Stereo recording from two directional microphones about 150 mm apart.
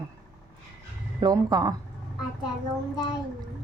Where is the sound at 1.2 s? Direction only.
25° right (ahead or behind).